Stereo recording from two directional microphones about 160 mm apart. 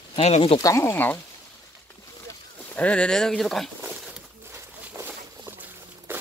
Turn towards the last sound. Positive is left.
turn(degrees=-15)  # may be behind; listen again after turning